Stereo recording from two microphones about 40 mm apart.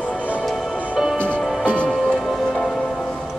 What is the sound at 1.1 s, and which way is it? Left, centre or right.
Music, left.